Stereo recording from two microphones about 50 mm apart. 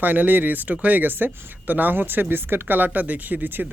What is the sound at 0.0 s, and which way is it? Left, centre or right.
Speech, right.